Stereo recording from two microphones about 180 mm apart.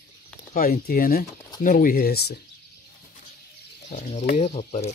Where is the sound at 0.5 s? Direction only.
50° left (ahead or behind).